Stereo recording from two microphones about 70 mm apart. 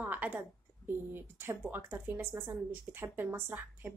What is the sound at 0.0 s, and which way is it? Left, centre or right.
A woman's voice, right.